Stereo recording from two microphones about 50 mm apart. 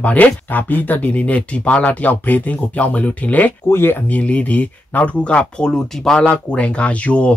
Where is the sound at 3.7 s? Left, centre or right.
Left.